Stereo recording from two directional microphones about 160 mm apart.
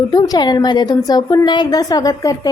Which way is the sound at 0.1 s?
25° left (ahead or behind).